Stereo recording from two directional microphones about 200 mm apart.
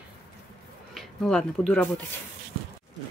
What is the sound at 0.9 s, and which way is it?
Speech, centre (ahead or behind).